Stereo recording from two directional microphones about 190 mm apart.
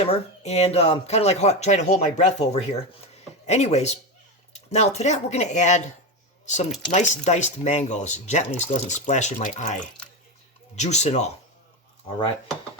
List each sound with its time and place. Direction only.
0.0 s speech: 35° left (ahead or behind)
6.4 s a sound: 40° left (ahead or behind)
6.9 s speech: 40° left (ahead or behind)